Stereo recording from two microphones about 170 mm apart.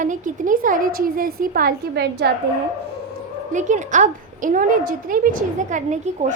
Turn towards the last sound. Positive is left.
turn(degrees=-45)  # may be behind; listen again after turning